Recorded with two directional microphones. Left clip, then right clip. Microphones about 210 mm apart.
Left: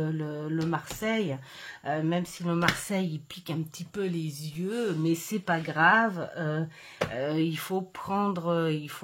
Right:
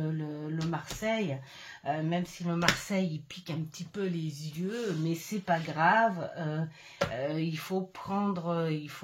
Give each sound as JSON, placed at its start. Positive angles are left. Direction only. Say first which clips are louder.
{"t": 0.0, "sound": "a sound", "louder": "left 4 dB", "side_deg": 50}
{"t": 1.9, "sound": "speech", "louder": "left 3 dB", "side_deg": 45}
{"t": 5.0, "sound": "speech", "louder": "left 4 dB", "side_deg": 45}